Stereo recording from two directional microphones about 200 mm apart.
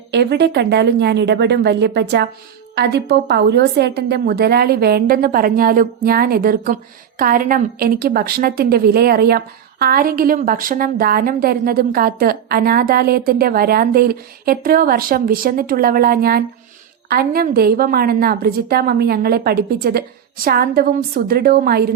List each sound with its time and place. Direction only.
0.1 s a woman's voice: 55° right (ahead or behind)